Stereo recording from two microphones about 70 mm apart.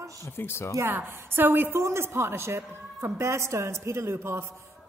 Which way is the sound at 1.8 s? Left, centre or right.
Right.